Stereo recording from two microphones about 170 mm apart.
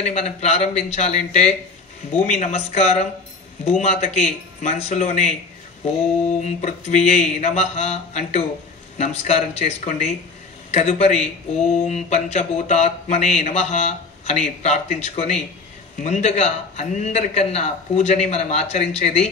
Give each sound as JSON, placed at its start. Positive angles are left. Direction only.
{"t": 0.0, "sound": "speech", "side_deg": 40}
{"t": 6.4, "sound": "speech", "side_deg": 40}